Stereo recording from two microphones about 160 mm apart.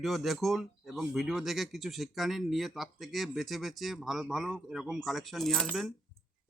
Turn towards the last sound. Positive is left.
turn(degrees=0)  # may be behind; listen again after turning